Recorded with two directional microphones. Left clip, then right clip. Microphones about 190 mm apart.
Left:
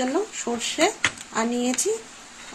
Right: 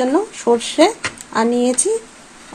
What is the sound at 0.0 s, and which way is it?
Speech, 40° right (ahead or behind).